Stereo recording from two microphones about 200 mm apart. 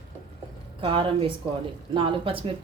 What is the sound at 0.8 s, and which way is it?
Speech, 25° right (ahead or behind).